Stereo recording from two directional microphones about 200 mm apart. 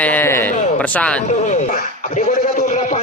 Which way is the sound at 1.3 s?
35° left (ahead or behind).